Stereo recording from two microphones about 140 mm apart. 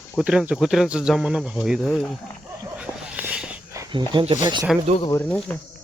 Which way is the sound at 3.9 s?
35° right (ahead or behind).